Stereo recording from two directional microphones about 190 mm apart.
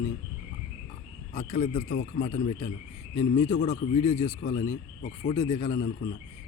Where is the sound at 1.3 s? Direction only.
40° left (ahead or behind).